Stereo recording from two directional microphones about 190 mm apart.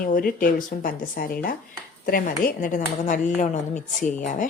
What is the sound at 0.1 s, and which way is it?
Speech, 45° left (ahead or behind).